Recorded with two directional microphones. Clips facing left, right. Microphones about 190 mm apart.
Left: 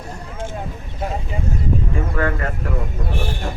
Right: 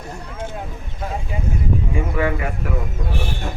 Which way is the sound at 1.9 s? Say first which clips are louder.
Right 1 dB; 10° right (ahead or behind).